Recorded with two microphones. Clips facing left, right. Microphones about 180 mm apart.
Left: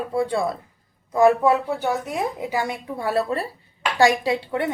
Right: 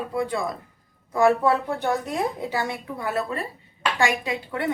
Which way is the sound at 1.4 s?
10° left (ahead or behind).